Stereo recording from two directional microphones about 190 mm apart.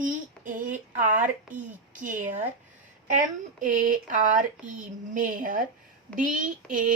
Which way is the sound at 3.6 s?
45° right (ahead or behind).